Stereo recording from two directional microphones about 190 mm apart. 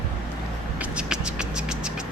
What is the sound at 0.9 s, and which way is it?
Scratch, 5° right (ahead or behind).